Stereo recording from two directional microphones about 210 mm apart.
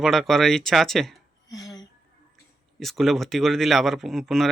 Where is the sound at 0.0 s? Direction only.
Centre (ahead or behind).